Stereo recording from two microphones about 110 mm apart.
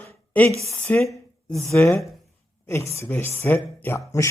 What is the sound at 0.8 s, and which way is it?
Speech, 5° left (ahead or behind).